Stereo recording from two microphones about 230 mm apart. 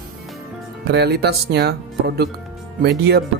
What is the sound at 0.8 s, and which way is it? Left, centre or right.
Speech, right.